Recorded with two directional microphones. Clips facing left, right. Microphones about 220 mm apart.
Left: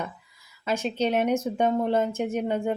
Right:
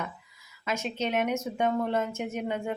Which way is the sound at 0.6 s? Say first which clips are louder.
Left 5 dB; 30° left (ahead or behind).